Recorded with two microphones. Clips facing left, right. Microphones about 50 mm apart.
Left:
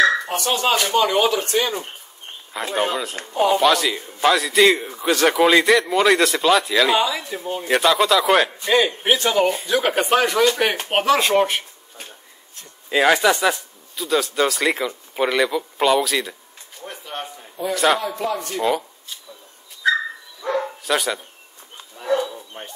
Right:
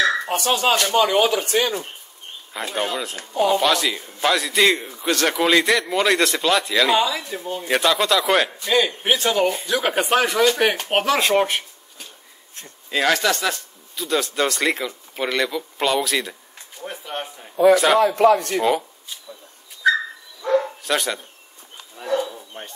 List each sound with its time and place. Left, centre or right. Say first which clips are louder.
0.2 s a sound: right 1 dB; centre
0.5 s speech: even; centre
2.5 s speech: left 3 dB; centre
8.5 s a man's voice: left 2 dB; centre
9.0 s speech: left 1 dB; centre
12.9 s speech: left 3 dB; centre
13.9 s speech: left 2 dB; centre
18.0 s a man's voice: right 9 dB; right
18.6 s speech: right 1 dB; centre
20.4 s bow-wow: right 2 dB; centre
21.9 s bird: left 2 dB; centre
22.5 s speech: right 1 dB; centre